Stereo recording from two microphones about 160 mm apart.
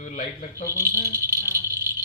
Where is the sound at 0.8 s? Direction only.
15° right (ahead or behind).